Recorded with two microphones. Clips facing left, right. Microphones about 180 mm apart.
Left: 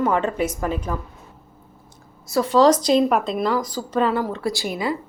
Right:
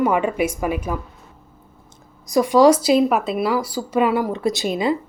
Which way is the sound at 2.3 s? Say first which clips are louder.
Right 2 dB; 15° right (ahead or behind).